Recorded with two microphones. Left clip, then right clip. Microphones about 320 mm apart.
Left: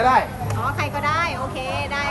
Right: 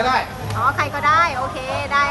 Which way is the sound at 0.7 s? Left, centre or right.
Centre.